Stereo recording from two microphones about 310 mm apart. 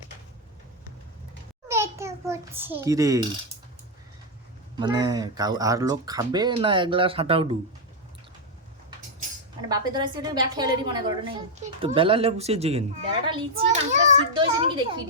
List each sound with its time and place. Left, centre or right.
1.6 s a sound: centre
4.8 s speech: centre
9.6 s a child's voice: centre